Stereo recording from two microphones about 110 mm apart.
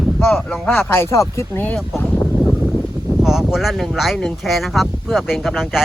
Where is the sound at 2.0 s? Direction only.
15° left (ahead or behind).